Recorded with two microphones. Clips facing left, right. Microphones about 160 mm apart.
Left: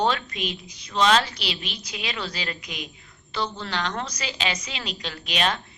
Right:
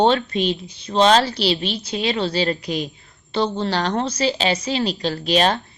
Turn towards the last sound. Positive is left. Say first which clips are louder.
# right 8 dB
turn(degrees=-35)  # may be behind; listen again after turning